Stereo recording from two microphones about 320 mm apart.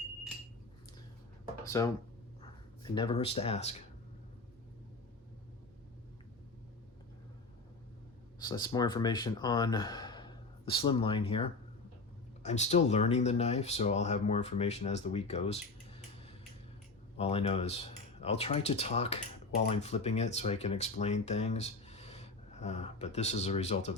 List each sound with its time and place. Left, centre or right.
1.6 s speech: centre
8.4 s speech: centre